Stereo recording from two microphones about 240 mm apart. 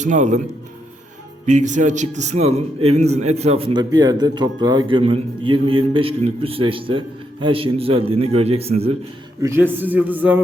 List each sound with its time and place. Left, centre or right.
0.0 s a man's voice: right
1.5 s a man's voice: right
9.4 s a man's voice: centre